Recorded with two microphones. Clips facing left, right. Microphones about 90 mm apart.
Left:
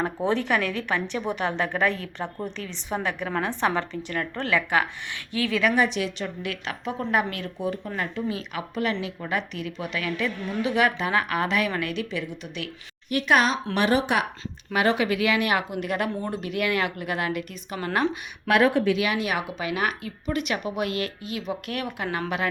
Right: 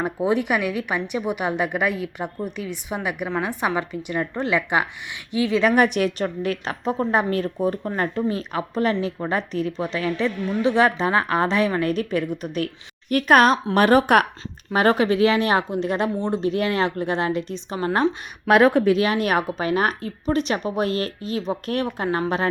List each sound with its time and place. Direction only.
0.0 s a woman's voice: 10° right (ahead or behind)
5.7 s a woman's voice: 55° right (ahead or behind)
14.7 s a woman's voice: 40° right (ahead or behind)
18.4 s a woman's voice: 50° right (ahead or behind)